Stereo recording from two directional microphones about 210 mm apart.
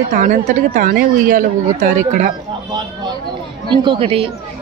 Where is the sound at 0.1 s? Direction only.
35° right (ahead or behind).